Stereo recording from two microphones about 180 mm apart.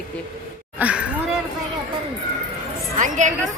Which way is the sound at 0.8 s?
5° right (ahead or behind).